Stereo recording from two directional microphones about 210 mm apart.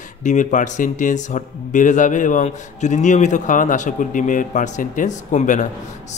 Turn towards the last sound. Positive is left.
turn(degrees=35)  # may be behind; listen again after turning